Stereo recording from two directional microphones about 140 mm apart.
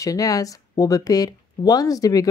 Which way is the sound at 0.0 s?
25° left (ahead or behind).